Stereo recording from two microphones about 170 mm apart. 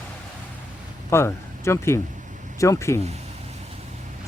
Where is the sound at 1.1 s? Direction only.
15° left (ahead or behind).